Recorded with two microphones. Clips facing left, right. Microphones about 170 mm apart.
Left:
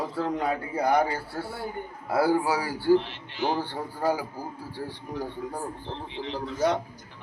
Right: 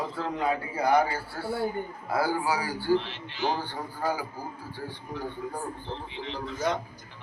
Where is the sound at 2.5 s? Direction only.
30° left (ahead or behind).